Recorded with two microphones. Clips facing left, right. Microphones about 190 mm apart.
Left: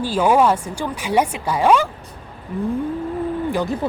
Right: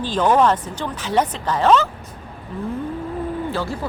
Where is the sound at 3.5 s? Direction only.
15° left (ahead or behind).